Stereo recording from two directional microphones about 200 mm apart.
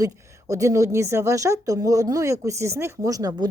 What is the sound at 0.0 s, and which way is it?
A woman's voice, 15° right (ahead or behind).